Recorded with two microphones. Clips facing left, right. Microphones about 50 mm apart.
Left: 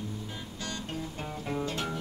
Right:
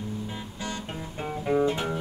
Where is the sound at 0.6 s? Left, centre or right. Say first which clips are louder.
Right 1 dB; right.